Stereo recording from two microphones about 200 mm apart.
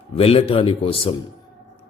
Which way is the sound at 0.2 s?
30° left (ahead or behind).